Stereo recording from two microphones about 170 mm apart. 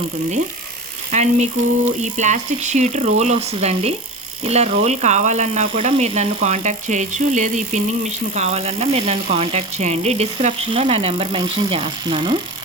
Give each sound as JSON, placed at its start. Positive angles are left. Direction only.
{"t": 1.1, "sound": "speech", "side_deg": -40}